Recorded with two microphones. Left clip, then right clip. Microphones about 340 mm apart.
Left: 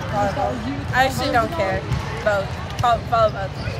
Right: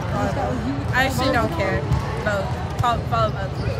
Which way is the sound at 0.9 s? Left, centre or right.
Centre.